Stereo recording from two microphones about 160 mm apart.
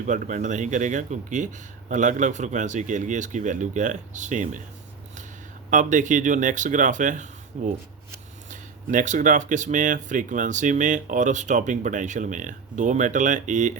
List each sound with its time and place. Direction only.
0.0 s speech: 50° right (ahead or behind)
5.7 s speech: 50° right (ahead or behind)